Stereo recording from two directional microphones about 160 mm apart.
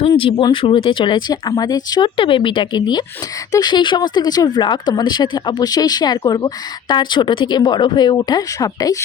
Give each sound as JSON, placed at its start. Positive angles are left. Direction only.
{"t": 0.0, "sound": "speech", "side_deg": 35}